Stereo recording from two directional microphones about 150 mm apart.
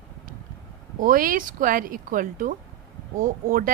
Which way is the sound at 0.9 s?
70° right (ahead or behind).